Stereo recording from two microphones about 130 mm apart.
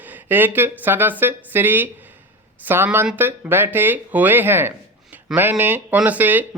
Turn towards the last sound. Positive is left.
turn(degrees=-15)  # may be behind; listen again after turning